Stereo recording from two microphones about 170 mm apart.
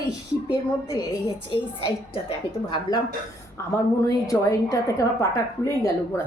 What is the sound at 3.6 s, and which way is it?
A woman's voice, 15° left (ahead or behind).